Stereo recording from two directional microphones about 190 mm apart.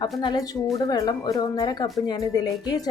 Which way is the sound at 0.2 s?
20° left (ahead or behind).